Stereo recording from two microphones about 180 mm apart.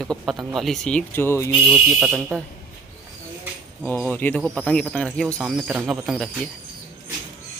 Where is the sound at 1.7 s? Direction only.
5° right (ahead or behind).